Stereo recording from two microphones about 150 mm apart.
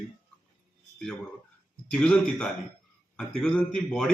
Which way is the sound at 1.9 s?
10° left (ahead or behind).